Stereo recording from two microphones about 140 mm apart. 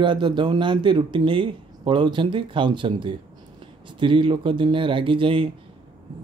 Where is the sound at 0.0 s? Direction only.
35° right (ahead or behind).